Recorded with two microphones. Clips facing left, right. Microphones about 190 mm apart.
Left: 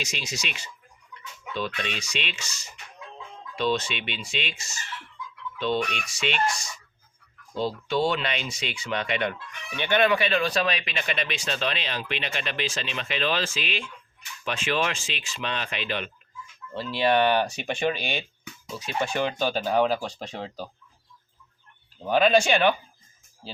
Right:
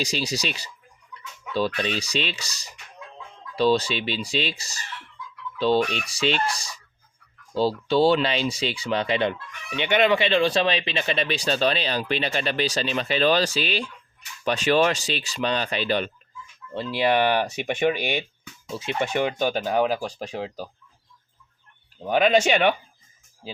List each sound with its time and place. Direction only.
0.0 s speech: 35° right (ahead or behind)
16.7 s speech: 20° right (ahead or behind)
18.7 s speech: 25° right (ahead or behind); by 20.7 s 10° right (ahead or behind)
22.0 s speech: 15° right (ahead or behind)